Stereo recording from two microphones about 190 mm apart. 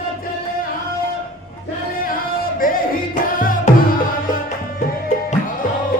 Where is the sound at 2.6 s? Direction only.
50° left (ahead or behind).